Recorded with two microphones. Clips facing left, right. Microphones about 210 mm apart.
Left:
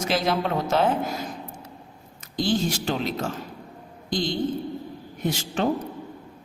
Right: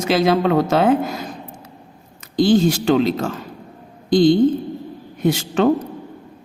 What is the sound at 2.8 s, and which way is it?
Speech, 90° right.